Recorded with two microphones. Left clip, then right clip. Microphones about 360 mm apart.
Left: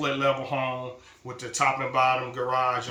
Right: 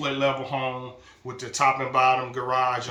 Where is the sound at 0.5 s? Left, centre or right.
Centre.